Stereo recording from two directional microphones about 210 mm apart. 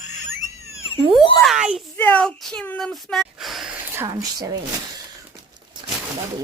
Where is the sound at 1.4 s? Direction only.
Centre (ahead or behind).